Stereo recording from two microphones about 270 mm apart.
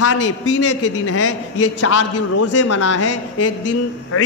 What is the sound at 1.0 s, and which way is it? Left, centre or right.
A man's voice, left.